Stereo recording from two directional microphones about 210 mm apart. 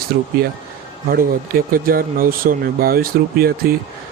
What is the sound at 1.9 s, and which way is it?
Speech, 45° right (ahead or behind).